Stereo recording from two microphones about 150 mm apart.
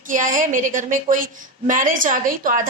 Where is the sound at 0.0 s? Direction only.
60° right (ahead or behind).